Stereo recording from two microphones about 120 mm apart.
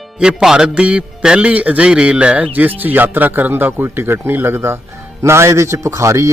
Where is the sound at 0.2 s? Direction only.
5° right (ahead or behind).